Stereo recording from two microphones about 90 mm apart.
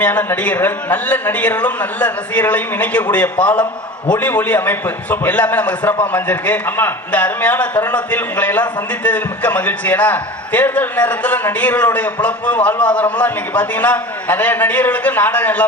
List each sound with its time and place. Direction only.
0.0 s a man's voice: 20° left (ahead or behind)